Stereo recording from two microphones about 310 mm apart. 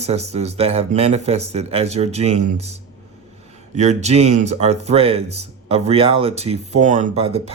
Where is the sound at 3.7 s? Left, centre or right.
Right.